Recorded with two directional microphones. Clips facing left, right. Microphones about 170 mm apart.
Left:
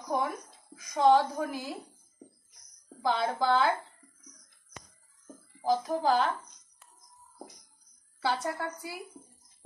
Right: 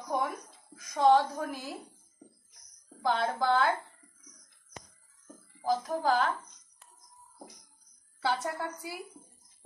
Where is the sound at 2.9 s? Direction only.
10° left (ahead or behind).